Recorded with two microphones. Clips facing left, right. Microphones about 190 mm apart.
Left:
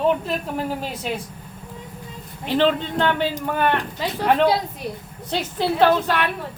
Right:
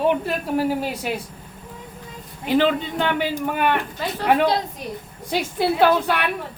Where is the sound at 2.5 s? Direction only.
10° right (ahead or behind).